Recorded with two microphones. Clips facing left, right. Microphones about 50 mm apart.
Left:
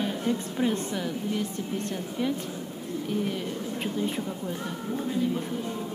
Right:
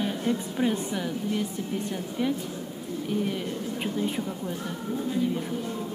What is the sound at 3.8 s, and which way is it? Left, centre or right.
Speech, centre.